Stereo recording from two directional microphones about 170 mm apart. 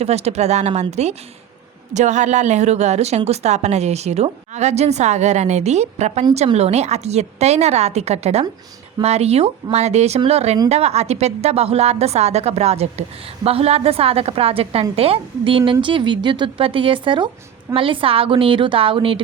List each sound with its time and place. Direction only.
0.0 s a woman's voice: 40° right (ahead or behind)